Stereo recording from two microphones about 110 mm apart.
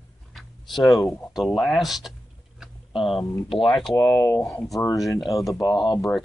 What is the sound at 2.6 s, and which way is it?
Tick-tock, centre (ahead or behind).